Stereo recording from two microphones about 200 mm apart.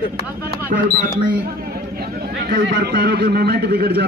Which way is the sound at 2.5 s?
50° right (ahead or behind).